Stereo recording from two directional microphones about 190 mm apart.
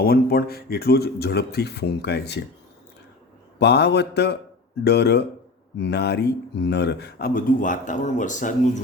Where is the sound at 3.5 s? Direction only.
60° left (ahead or behind).